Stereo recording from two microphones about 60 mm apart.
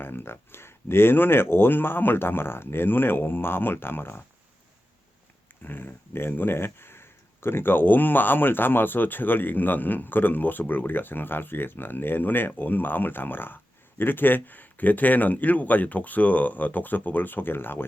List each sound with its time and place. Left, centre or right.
0.0 s speech: left
5.6 s speech: left